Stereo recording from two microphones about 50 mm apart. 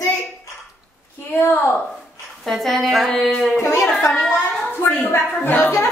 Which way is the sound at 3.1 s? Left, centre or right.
Centre.